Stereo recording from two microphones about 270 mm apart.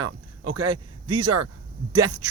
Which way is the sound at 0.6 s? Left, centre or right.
Centre.